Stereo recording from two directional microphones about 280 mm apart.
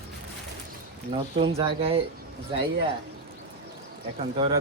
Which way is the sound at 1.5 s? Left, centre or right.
Centre.